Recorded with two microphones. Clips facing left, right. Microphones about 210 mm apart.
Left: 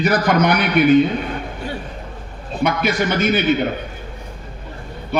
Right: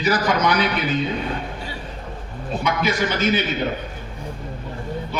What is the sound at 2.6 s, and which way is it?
Speech, 60° left (ahead or behind).